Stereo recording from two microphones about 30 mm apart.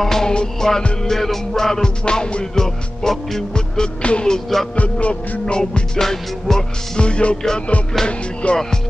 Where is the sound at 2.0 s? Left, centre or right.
Left.